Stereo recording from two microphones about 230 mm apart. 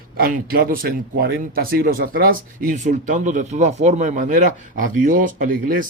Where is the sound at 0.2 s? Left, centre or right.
Right.